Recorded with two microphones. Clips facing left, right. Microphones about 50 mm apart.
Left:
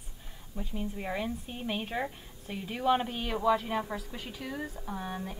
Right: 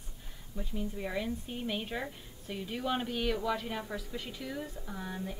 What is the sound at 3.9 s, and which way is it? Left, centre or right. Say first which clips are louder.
Speech: left 1 dB; left.